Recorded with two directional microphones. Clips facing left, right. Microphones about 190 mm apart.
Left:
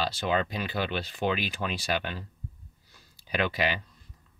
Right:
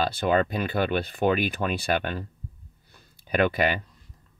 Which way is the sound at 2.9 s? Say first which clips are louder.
Right 6 dB; 55° right (ahead or behind).